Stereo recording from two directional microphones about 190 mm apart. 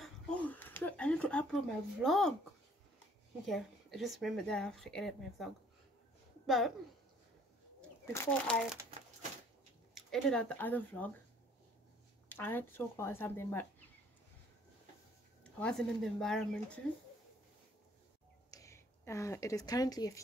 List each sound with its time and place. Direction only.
0.0 s a sound: 5° left (ahead or behind)
3.4 s a woman's voice: centre (ahead or behind)
8.0 s speech: 15° left (ahead or behind)
9.9 s speech: 5° left (ahead or behind)
12.3 s speech: 10° left (ahead or behind)
15.4 s speech: 5° left (ahead or behind)
18.5 s a woman's voice: 15° left (ahead or behind)